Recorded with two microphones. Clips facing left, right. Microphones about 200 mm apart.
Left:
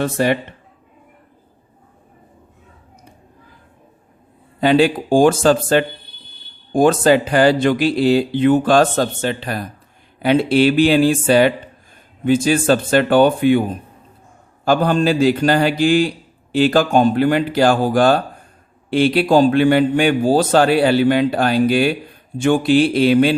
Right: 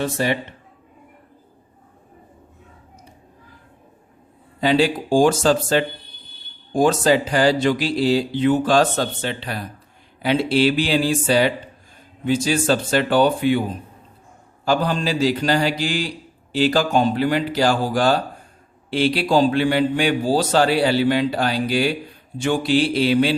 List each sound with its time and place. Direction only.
0.0 s speech: 55° left (ahead or behind)
4.6 s a man's voice: 55° left (ahead or behind)
14.6 s a man's voice: 55° left (ahead or behind)